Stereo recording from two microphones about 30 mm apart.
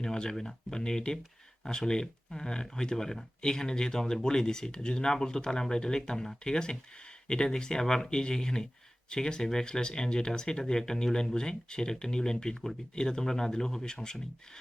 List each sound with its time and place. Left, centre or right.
0.0 s speech: left